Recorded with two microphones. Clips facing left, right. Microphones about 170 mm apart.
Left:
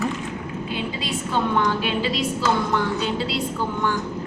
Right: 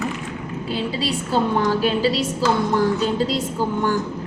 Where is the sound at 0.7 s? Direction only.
35° right (ahead or behind).